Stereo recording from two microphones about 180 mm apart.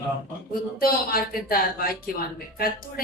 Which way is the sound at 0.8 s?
55° left (ahead or behind).